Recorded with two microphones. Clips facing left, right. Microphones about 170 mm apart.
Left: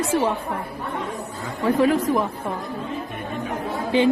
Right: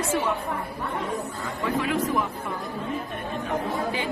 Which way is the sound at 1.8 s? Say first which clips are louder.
Left 8 dB; 40° left (ahead or behind).